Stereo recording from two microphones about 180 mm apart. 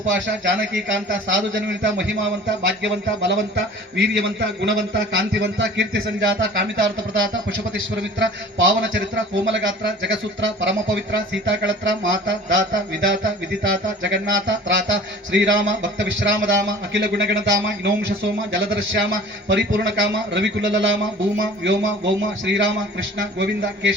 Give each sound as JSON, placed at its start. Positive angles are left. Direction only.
{"t": 0.0, "sound": "a man's voice", "side_deg": -90}
{"t": 8.5, "sound": "a man's voice", "side_deg": -90}
{"t": 18.5, "sound": "a man's voice", "side_deg": -90}